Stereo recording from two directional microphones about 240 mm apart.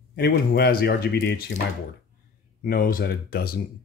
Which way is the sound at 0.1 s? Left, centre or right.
Left.